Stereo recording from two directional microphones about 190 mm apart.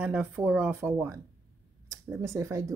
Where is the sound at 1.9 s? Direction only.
15° right (ahead or behind).